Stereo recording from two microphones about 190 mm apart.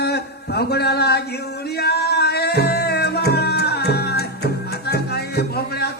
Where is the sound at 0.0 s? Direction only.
60° left (ahead or behind).